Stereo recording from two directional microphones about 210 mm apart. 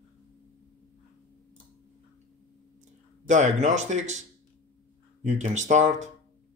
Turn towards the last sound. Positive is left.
turn(degrees=-35)  # may be behind; listen again after turning